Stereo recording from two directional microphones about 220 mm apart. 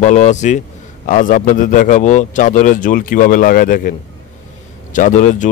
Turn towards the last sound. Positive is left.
turn(degrees=35)  # may be behind; listen again after turning